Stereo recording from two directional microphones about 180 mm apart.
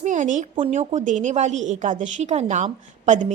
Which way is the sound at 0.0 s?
45° right (ahead or behind).